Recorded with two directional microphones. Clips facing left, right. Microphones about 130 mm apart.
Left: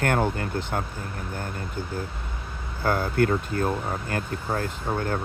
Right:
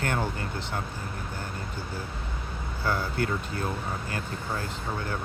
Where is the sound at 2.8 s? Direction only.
50° left (ahead or behind).